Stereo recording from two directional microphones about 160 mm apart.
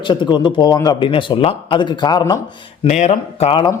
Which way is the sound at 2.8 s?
45° left (ahead or behind).